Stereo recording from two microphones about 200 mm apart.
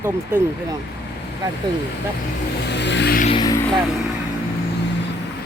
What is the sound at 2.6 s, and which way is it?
Vehicle, 60° left (ahead or behind).